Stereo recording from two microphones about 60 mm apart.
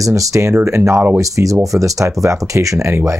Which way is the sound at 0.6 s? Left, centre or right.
Right.